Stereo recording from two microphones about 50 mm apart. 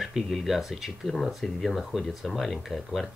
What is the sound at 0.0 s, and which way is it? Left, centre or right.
Speech, centre.